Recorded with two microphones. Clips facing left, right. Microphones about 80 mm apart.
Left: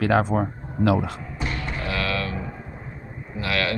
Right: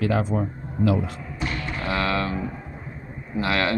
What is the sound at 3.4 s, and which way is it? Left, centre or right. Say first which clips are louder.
Speech: right 2 dB; right.